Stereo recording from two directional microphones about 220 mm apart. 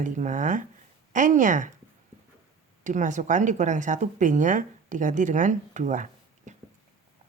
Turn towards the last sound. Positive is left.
turn(degrees=-35)  # may be behind; listen again after turning